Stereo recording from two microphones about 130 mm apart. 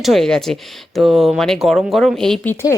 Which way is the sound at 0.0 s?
Centre (ahead or behind).